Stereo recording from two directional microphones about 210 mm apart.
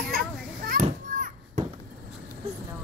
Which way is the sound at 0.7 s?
40° right (ahead or behind).